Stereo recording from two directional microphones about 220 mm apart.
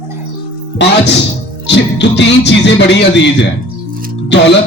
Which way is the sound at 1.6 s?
55° left (ahead or behind).